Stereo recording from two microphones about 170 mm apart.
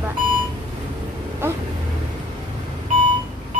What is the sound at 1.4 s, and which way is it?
Vehicle, 15° right (ahead or behind).